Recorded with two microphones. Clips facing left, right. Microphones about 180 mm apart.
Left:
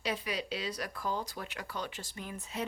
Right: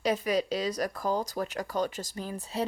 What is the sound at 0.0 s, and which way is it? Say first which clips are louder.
Speech: right 9 dB; 45° right (ahead or behind).